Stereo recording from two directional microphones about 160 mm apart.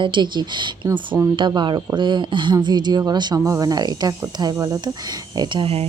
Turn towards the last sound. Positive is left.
turn(degrees=-35)  # may be behind; listen again after turning